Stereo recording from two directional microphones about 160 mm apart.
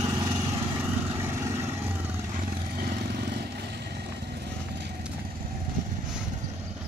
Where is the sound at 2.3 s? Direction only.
70° right (ahead or behind); by 4.9 s 90° right.